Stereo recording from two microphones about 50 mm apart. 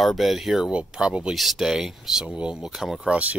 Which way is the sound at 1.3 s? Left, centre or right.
Centre.